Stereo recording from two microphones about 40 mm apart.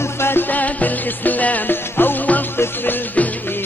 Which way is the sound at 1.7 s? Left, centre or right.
Left.